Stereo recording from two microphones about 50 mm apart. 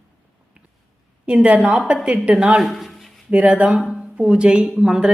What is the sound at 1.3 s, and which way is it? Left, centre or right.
A woman's voice, right.